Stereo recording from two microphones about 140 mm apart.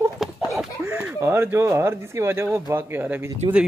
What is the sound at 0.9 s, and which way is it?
Speech, 10° right (ahead or behind).